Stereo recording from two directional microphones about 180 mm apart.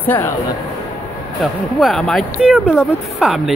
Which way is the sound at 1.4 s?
Centre (ahead or behind).